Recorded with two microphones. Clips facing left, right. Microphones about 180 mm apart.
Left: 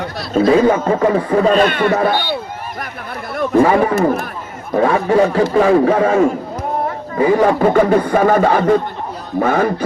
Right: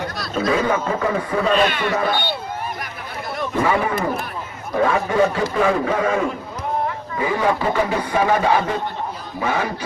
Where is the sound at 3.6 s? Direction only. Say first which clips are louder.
Left 7 dB; 45° left (ahead or behind).